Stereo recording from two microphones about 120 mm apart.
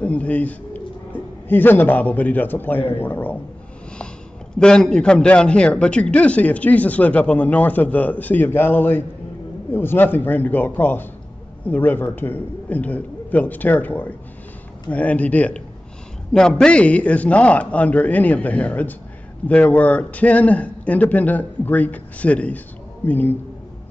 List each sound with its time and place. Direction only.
0.0 s a man's voice: 10° left (ahead or behind)
4.6 s a man's voice: 5° left (ahead or behind)